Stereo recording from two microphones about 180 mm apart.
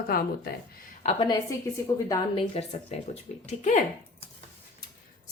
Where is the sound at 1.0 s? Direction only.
30° left (ahead or behind).